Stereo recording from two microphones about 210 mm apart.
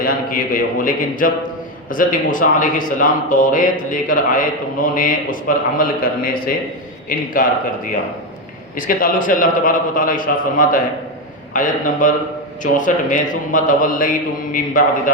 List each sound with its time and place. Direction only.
0.0 s a man's voice: 45° left (ahead or behind)
8.7 s a man's voice: 40° left (ahead or behind)